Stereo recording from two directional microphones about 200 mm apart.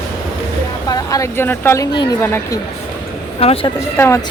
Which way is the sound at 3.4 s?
30° left (ahead or behind).